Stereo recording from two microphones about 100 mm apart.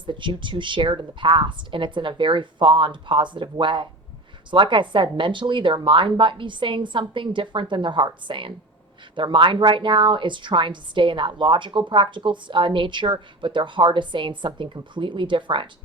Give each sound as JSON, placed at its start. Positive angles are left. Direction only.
{"t": 0.0, "sound": "a woman's voice", "side_deg": -55}